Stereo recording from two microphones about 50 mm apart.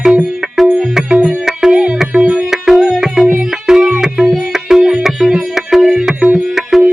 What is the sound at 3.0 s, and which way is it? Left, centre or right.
Tabla, centre.